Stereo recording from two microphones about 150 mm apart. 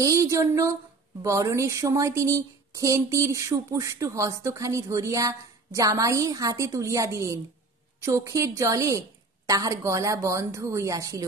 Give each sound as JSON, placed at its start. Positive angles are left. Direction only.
{"t": 0.0, "sound": "speech", "side_deg": -20}